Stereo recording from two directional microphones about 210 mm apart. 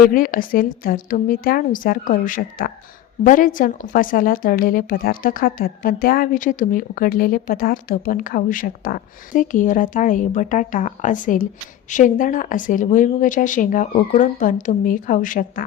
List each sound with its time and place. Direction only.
0.1 s speech: 40° left (ahead or behind)